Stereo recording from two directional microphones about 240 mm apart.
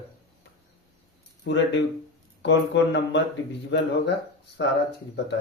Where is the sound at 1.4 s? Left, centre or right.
Left.